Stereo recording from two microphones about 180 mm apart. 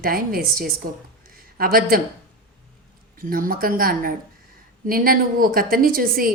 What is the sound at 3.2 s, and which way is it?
A woman's voice, 50° right (ahead or behind).